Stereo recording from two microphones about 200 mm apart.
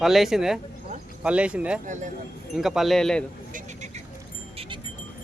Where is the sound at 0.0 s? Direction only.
Centre (ahead or behind).